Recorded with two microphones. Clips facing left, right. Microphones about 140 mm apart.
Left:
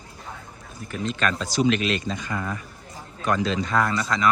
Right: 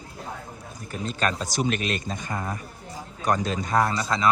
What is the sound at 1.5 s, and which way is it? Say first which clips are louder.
Speech: left 4 dB; 45° right (ahead or behind).